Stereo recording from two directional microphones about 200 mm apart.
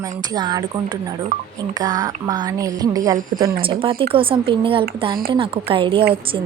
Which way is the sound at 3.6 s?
25° right (ahead or behind).